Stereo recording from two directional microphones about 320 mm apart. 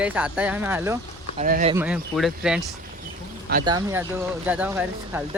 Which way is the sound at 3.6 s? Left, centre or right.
Centre.